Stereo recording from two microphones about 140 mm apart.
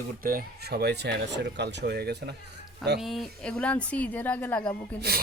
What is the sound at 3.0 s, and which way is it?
A woman's voice, centre (ahead or behind).